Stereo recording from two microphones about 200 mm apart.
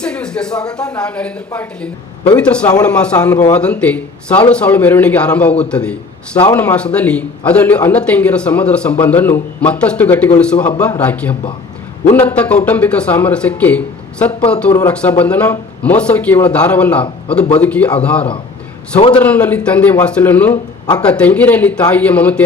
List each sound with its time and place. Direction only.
0.0 s a sound: 5° left (ahead or behind)
0.9 s a woman's voice: 5° left (ahead or behind)
18.9 s a man's voice: 30° left (ahead or behind)
19.2 s a man's voice: 10° left (ahead or behind)